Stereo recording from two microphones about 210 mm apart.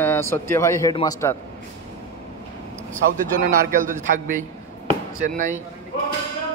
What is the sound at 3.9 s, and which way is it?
A man's voice, 40° right (ahead or behind).